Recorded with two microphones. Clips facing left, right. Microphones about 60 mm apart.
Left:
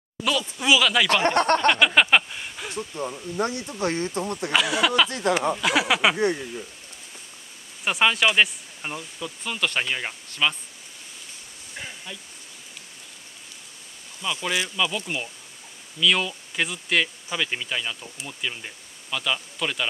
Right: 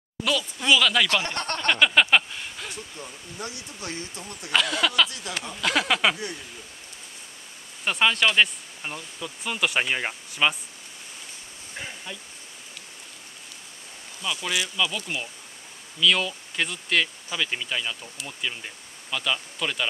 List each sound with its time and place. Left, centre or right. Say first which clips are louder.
0.2 s speech: left 1 dB; centre
1.0 s speech: left 6 dB; left
2.0 s a sound: left 1 dB; centre
2.7 s speech: left 8 dB; left
4.5 s speech: left 1 dB; centre
6.1 s speech: left 11 dB; left
7.8 s speech: left 1 dB; centre
9.4 s speech: right 1 dB; centre
11.7 s a sound: right 1 dB; centre
14.2 s speech: left 2 dB; centre